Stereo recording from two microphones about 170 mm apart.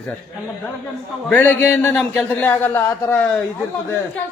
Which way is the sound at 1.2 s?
10° left (ahead or behind).